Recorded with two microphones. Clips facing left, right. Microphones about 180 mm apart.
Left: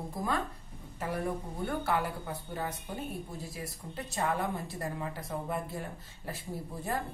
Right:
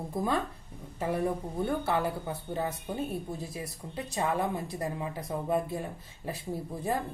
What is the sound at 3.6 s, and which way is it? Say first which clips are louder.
Speech: right 3 dB; 20° right (ahead or behind).